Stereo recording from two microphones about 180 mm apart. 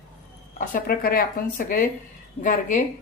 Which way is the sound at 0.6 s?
55° left (ahead or behind).